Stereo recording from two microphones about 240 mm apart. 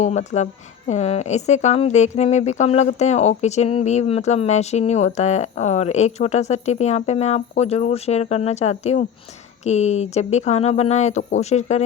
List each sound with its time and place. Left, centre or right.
0.0 s speech: left